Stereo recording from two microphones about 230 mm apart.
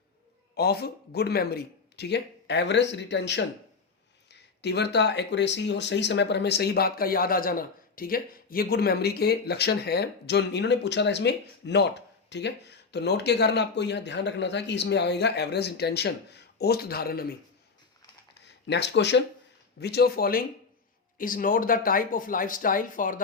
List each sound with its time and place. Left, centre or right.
0.5 s speech: left
18.3 s speech: left